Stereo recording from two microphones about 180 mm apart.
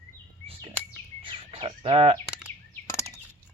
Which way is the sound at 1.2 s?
30° right (ahead or behind).